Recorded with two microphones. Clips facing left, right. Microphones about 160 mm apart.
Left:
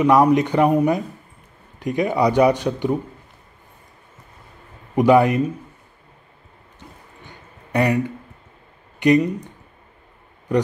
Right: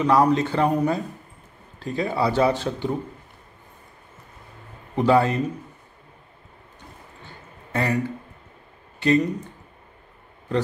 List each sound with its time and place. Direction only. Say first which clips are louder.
0.0 s speech: left 4 dB; 15° left (ahead or behind)
4.9 s speech: left 4 dB; 15° left (ahead or behind)
7.2 s a sound: even; 15° left (ahead or behind)
9.0 s speech: left 4 dB; 15° left (ahead or behind)